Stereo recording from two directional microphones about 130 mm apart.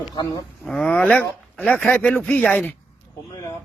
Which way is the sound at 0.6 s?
5° left (ahead or behind).